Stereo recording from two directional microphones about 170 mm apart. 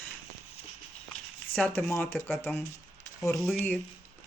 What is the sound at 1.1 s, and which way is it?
Speech, 10° left (ahead or behind).